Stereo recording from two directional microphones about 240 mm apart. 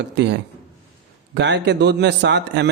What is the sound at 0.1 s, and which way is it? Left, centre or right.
A man's voice, right.